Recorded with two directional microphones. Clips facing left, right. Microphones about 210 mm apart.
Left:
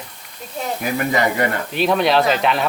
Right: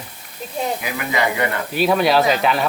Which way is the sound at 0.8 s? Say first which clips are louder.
Left 3 dB; 45° left (ahead or behind).